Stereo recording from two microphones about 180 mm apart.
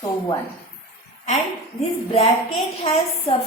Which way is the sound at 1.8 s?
35° left (ahead or behind).